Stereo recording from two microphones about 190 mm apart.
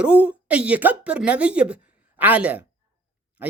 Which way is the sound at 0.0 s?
5° right (ahead or behind).